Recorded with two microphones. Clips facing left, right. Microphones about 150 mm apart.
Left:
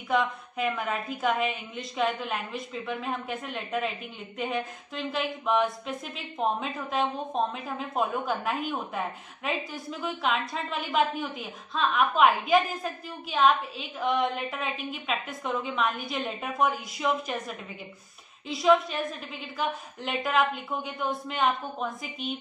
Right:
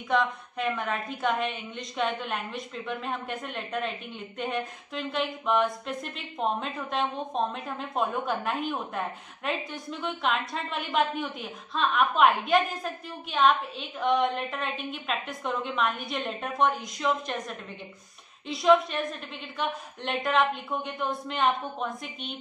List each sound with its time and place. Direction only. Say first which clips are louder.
0.1 s a woman's voice: even; 5° left (ahead or behind)